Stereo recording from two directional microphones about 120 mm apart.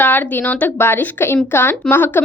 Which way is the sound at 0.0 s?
15° left (ahead or behind).